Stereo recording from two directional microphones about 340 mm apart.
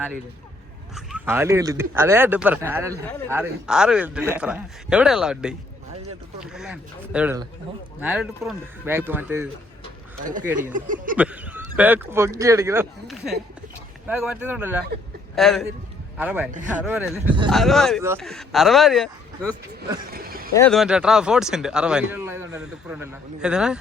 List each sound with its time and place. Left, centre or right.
0.9 s speech: centre
10.6 s speech: right
11.2 s a sound: centre
11.8 s speech: centre
17.5 s speech: centre
20.1 s speech: right
20.5 s speech: centre